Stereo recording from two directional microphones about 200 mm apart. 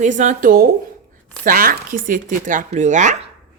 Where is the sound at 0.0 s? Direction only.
35° right (ahead or behind).